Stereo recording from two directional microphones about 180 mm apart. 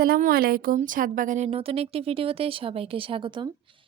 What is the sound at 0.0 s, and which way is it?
A woman's voice, 55° right (ahead or behind).